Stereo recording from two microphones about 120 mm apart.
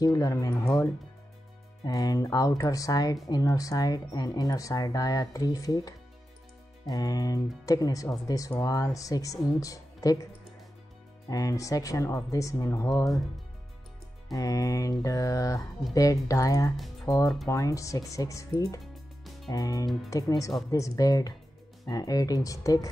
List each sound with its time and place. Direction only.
0.0 s speech: 25° left (ahead or behind)
11.2 s speech: 30° left (ahead or behind)
14.3 s speech: 30° left (ahead or behind)